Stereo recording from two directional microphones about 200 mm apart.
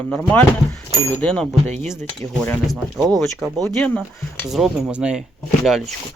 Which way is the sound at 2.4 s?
5° left (ahead or behind).